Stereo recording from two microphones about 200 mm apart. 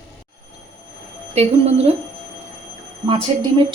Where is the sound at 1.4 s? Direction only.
30° right (ahead or behind).